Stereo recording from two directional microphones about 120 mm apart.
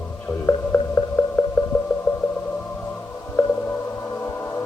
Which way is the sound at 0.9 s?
15° left (ahead or behind).